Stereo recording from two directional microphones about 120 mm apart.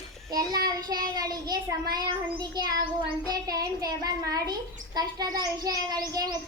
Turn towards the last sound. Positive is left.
turn(degrees=-30)  # may be behind; listen again after turning